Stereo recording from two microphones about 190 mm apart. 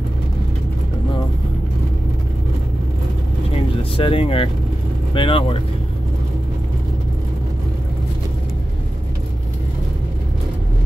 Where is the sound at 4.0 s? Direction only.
30° left (ahead or behind).